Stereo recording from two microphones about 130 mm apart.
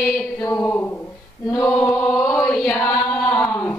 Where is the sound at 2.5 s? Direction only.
15° left (ahead or behind).